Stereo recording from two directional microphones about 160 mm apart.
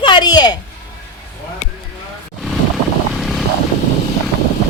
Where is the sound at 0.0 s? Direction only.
30° left (ahead or behind).